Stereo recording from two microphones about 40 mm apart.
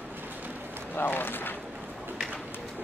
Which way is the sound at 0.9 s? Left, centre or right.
Left.